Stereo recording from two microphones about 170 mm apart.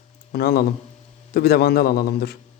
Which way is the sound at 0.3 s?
65° left (ahead or behind).